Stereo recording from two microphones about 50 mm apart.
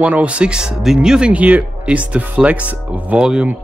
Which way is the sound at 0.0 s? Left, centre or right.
Right.